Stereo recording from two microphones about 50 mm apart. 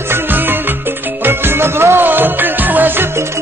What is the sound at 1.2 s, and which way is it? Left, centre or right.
Music, right.